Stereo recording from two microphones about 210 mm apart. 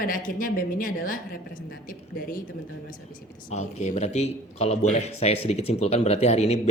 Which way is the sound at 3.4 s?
35° left (ahead or behind).